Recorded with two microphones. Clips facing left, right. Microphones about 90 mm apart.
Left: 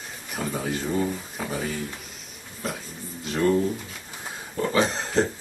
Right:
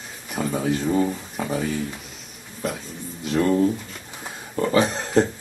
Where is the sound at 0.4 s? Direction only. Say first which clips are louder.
Right 5 dB; 5° right (ahead or behind).